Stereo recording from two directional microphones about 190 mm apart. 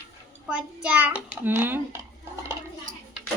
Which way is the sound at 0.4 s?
5° right (ahead or behind).